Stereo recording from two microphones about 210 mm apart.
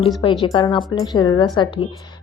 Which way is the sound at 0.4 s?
20° left (ahead or behind).